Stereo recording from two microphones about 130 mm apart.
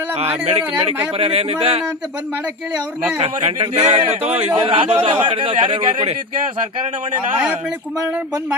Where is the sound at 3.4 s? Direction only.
50° right (ahead or behind).